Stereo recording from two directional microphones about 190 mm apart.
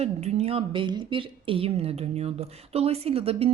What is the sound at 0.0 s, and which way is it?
A woman's voice, 35° right (ahead or behind).